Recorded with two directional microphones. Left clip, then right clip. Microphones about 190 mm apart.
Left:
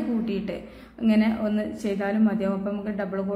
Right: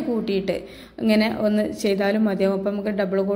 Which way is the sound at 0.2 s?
25° right (ahead or behind).